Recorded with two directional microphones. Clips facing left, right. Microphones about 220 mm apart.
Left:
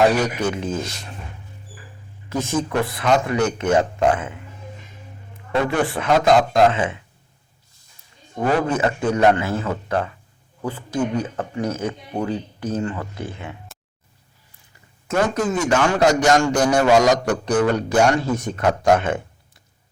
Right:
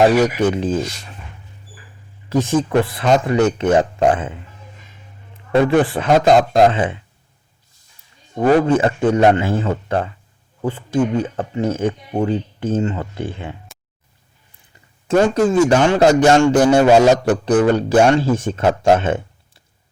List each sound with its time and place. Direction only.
0.4 s speech: 30° right (ahead or behind)
2.3 s a man's voice: 30° right (ahead or behind)
5.6 s speech: 30° right (ahead or behind)
8.6 s a man's voice: 30° right (ahead or behind)
15.0 s a man's voice: 30° right (ahead or behind)